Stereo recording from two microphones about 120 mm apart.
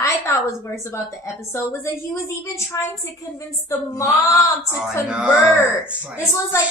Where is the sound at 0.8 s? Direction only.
25° left (ahead or behind).